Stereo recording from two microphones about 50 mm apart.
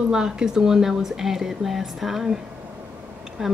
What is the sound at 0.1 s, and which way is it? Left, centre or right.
Speech, centre.